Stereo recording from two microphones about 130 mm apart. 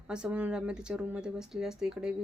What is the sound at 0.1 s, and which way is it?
A woman's voice, 10° right (ahead or behind).